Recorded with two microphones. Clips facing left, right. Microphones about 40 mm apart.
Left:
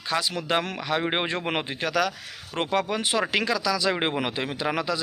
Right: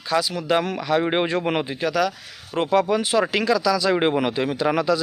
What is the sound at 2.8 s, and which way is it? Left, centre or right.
Speech, left.